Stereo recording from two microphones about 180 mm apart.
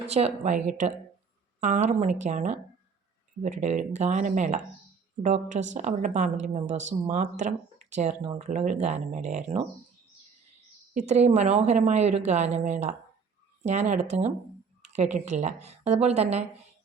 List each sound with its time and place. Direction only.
0.1 s speech: 35° right (ahead or behind)
10.9 s a woman's voice: 40° right (ahead or behind)